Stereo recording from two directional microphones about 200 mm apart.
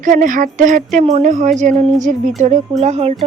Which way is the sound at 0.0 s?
40° right (ahead or behind).